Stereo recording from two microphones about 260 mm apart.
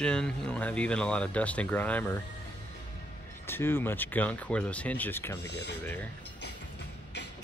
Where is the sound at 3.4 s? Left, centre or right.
Centre.